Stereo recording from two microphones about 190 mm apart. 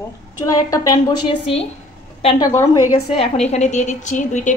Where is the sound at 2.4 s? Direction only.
15° left (ahead or behind).